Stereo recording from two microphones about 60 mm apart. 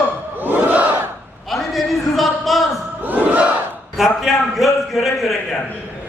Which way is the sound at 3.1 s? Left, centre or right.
Right.